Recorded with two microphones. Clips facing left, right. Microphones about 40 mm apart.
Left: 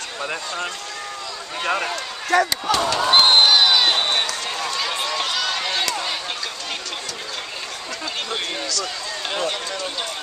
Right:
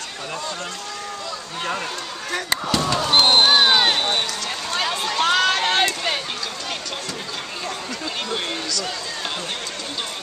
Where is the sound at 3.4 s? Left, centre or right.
Right.